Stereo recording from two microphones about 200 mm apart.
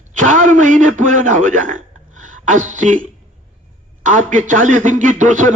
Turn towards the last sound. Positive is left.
turn(degrees=-40)  # may be behind; listen again after turning